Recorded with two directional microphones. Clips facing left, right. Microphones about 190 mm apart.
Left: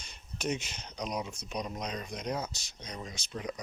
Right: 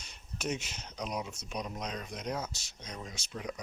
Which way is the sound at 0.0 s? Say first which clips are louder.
Left 2 dB; 5° right (ahead or behind).